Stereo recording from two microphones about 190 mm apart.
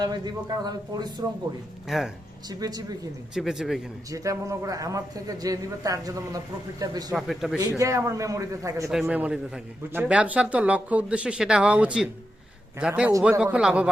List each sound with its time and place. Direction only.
0.0 s a man's voice: 20° right (ahead or behind)
1.9 s a man's voice: centre (ahead or behind)
2.5 s a man's voice: 20° right (ahead or behind)
3.3 s a man's voice: 5° right (ahead or behind)
4.1 s a man's voice: 15° right (ahead or behind)
7.1 s a man's voice: centre (ahead or behind)
7.7 s a man's voice: 15° right (ahead or behind)
8.9 s a man's voice: 5° right (ahead or behind)